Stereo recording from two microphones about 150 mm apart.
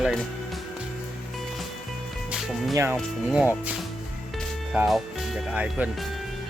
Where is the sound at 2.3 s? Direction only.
Centre (ahead or behind).